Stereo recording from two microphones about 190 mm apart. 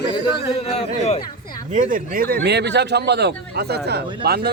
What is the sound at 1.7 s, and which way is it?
Speech, 40° right (ahead or behind).